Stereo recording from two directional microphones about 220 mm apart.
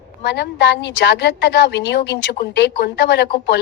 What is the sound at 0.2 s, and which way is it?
A woman's voice, 50° left (ahead or behind).